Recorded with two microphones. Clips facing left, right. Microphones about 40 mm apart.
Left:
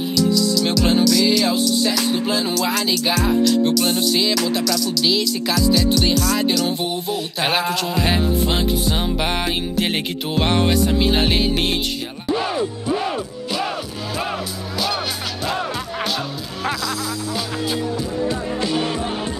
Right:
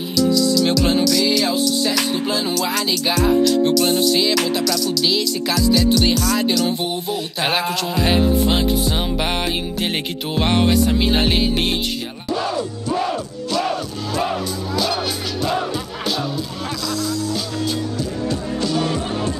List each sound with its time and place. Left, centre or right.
0.3 s music: centre
5.5 s music: centre
12.3 s music: left; by 14.3 s centre